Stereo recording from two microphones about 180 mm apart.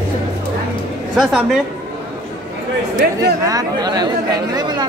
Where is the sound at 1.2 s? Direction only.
Centre (ahead or behind).